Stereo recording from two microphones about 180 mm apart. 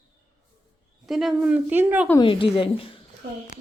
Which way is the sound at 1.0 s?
Centre (ahead or behind).